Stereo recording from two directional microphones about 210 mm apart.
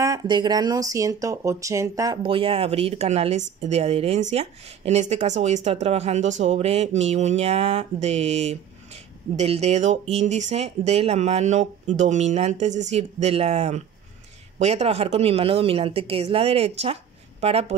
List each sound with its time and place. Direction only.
0.0 s speech: 20° right (ahead or behind)